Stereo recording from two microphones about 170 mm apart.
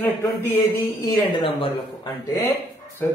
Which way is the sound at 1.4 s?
30° left (ahead or behind).